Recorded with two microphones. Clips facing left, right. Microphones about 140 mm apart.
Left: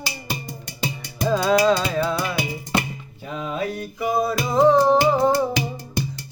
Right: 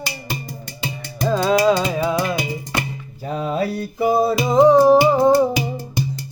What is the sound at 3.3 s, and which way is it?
Mantra, 35° right (ahead or behind).